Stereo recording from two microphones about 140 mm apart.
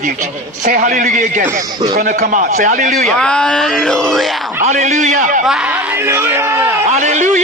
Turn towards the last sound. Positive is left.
turn(degrees=-60)  # may be behind; listen again after turning